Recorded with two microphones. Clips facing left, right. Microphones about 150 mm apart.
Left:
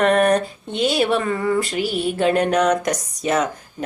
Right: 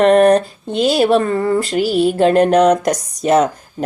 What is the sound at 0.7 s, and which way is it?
Speech, centre (ahead or behind).